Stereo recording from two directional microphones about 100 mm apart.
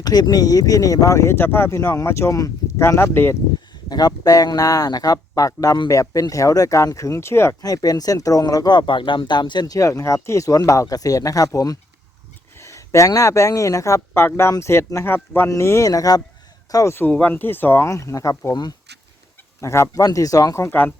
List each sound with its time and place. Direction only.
0.0 s speech: 40° left (ahead or behind); by 3.3 s 25° left (ahead or behind)
3.8 s speech: 40° left (ahead or behind)
7.6 s speech: 40° left (ahead or behind)
9.7 s speech: 35° left (ahead or behind)
16.7 s speech: 25° left (ahead or behind)
17.1 s speech: 15° left (ahead or behind); by 18.7 s 40° left (ahead or behind)
19.6 s speech: 30° left (ahead or behind)
20.7 s speech: 20° left (ahead or behind)